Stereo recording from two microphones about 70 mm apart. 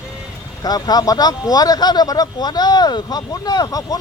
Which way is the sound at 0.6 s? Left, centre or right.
Left.